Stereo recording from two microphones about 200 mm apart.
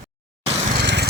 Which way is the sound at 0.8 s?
55° right (ahead or behind).